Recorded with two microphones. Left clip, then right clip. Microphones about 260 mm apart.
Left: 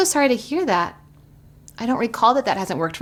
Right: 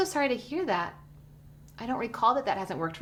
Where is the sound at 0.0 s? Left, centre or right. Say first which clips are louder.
Left 9 dB; left.